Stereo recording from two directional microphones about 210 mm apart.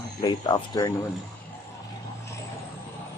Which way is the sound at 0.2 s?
20° left (ahead or behind).